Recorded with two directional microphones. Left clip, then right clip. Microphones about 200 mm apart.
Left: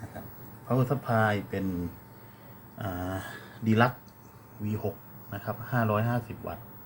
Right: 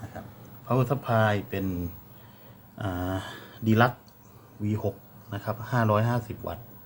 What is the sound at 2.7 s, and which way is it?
Speech, 15° right (ahead or behind).